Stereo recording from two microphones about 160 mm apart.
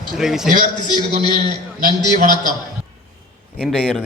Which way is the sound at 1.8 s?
60° right (ahead or behind).